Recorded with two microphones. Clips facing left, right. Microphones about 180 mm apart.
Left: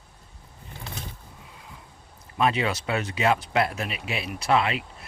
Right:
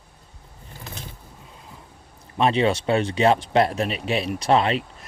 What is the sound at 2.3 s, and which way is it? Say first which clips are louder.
Speech: right 5 dB; 30° right (ahead or behind).